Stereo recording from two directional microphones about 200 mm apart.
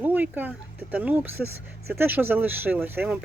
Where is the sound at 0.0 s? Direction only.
10° right (ahead or behind).